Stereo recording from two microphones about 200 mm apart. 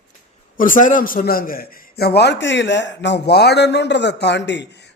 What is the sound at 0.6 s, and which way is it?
A man's voice, 40° left (ahead or behind).